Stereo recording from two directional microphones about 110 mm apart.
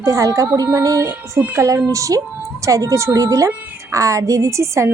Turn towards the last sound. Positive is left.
turn(degrees=-25)  # may be behind; listen again after turning